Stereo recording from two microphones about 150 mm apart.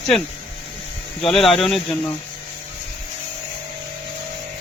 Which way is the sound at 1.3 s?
5° left (ahead or behind).